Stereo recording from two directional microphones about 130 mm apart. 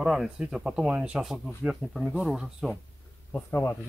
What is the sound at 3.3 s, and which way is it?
Speech, 15° left (ahead or behind).